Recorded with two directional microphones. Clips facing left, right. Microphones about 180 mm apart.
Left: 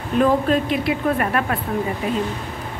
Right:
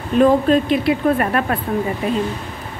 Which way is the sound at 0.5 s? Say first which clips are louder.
Right 4 dB; 30° right (ahead or behind).